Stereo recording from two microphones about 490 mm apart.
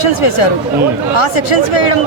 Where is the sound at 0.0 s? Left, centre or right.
Left.